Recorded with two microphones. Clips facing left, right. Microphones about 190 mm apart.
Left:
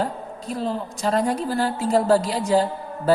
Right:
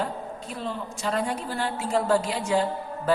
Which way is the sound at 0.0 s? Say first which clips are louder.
Left 4 dB; 35° left (ahead or behind).